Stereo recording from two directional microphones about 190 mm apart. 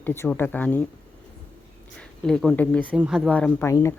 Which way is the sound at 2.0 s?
5° left (ahead or behind).